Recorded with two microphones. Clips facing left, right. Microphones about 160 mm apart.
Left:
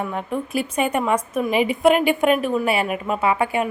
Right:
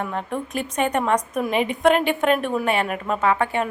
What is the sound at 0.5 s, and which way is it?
A woman's voice, 5° left (ahead or behind).